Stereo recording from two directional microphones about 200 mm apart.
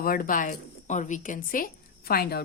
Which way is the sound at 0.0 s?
45° left (ahead or behind).